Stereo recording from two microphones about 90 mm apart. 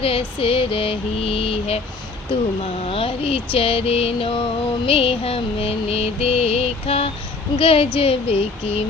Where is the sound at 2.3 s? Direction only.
90° left.